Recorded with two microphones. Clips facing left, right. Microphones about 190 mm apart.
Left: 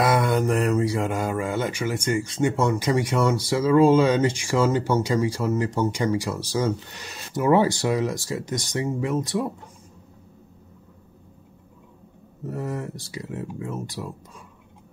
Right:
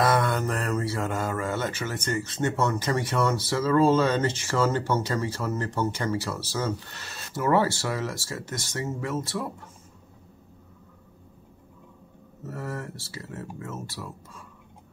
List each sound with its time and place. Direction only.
0.0 s speech: 15° left (ahead or behind)
12.4 s speech: 15° left (ahead or behind)